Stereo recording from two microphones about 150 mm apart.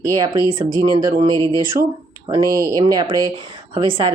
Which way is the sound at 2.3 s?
25° right (ahead or behind).